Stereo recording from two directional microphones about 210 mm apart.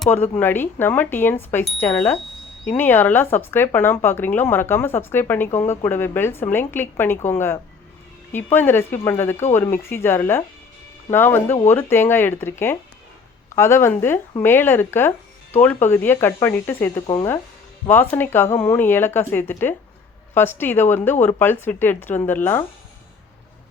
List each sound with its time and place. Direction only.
0.0 s a woman's voice: 10° left (ahead or behind)